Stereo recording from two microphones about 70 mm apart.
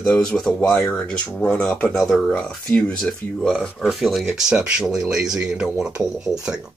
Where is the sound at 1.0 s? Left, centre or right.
Centre.